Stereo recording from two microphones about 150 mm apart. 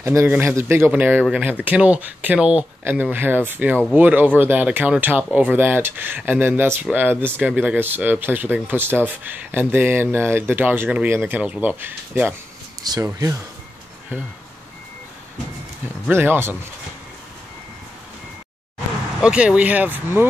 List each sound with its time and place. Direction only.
0.0 s speech: 20° right (ahead or behind)
12.8 s speech: 25° right (ahead or behind)
16.1 s speech: 15° right (ahead or behind)
19.2 s speech: 5° right (ahead or behind)